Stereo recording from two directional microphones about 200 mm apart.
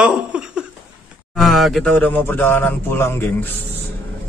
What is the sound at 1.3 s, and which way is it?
Speech, centre (ahead or behind).